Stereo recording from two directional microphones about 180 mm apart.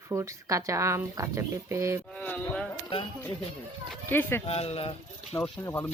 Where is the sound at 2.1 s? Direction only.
5° left (ahead or behind).